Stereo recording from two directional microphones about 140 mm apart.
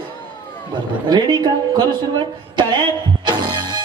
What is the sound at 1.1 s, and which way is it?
Speech, 30° right (ahead or behind).